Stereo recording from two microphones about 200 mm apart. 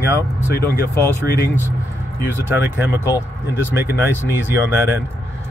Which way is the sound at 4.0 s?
10° right (ahead or behind).